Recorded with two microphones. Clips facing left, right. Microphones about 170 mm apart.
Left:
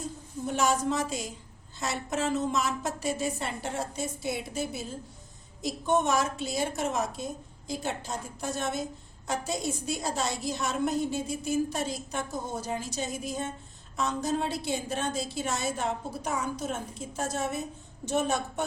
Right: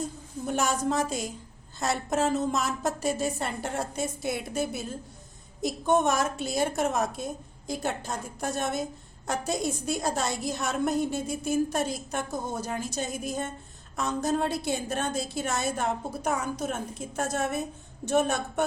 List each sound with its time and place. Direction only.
0.4 s a woman's voice: 50° right (ahead or behind)